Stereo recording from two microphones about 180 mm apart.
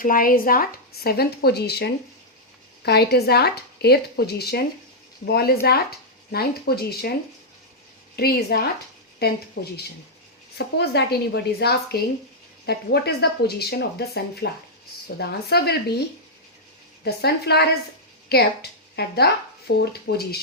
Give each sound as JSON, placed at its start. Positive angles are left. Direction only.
{"t": 0.0, "sound": "speech", "side_deg": 50}
{"t": 8.1, "sound": "speech", "side_deg": 60}
{"t": 10.8, "sound": "speech", "side_deg": 65}
{"t": 17.0, "sound": "speech", "side_deg": 65}